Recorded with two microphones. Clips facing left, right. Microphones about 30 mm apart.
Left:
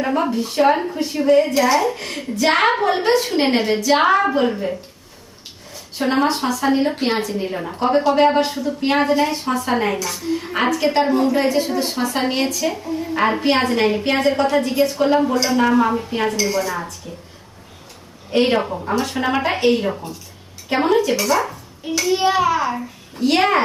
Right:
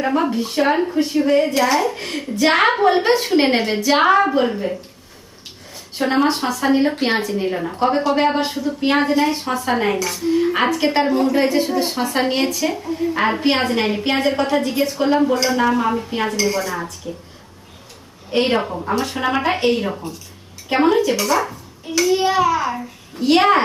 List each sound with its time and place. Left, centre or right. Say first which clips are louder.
0.0 s a woman's voice: right 1 dB; centre
2.6 s a woman's voice: right 2 dB; centre
4.0 s a woman's voice: right 1 dB; centre
11.0 s a woman's voice: even; centre
18.3 s a woman's voice: left 1 dB; centre
22.1 s a child's voice: left 1 dB; centre